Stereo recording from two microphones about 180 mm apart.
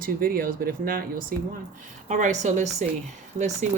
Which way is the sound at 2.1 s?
40° right (ahead or behind).